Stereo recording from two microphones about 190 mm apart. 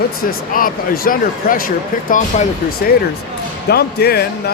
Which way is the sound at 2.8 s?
55° left (ahead or behind).